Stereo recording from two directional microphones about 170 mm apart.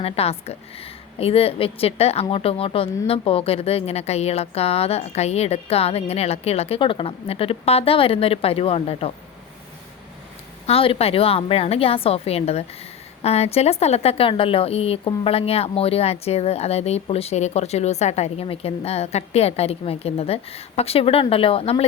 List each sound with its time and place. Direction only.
0.0 s a woman's voice: 35° left (ahead or behind)
10.7 s a woman's voice: 35° left (ahead or behind)